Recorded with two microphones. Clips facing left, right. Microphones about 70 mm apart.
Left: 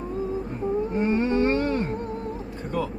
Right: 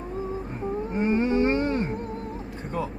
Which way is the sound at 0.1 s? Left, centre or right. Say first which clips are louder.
Left 3 dB; centre.